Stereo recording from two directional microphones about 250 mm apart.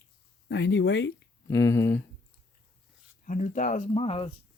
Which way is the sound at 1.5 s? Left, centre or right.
Centre.